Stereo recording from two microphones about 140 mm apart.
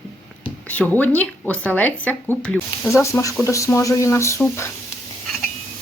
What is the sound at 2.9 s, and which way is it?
Speech, 20° left (ahead or behind).